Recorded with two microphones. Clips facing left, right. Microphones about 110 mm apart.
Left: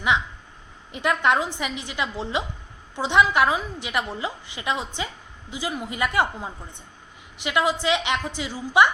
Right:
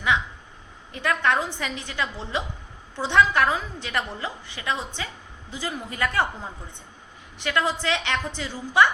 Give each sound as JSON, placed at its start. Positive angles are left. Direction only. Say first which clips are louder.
{"t": 0.9, "sound": "a woman's voice", "louder": "left 2 dB", "side_deg": 20}